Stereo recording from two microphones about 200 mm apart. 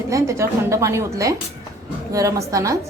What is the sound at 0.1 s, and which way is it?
A woman's voice, 15° right (ahead or behind).